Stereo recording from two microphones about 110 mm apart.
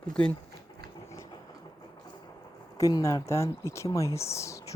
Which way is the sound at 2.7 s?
30° left (ahead or behind).